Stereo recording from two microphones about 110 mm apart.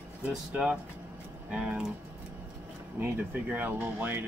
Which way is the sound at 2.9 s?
15° right (ahead or behind).